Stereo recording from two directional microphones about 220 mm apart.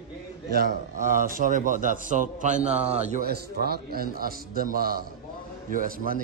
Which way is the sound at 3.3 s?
45° right (ahead or behind).